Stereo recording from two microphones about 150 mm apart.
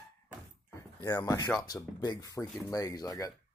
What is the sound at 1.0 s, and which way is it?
Speech, 20° left (ahead or behind).